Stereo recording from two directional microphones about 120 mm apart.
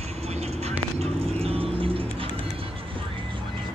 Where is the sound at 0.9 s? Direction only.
60° right (ahead or behind).